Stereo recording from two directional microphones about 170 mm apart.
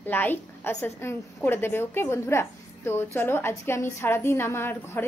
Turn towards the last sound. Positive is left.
turn(degrees=15)  # may be behind; listen again after turning